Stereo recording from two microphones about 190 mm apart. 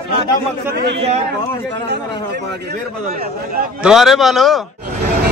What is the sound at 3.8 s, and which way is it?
Speech, centre (ahead or behind).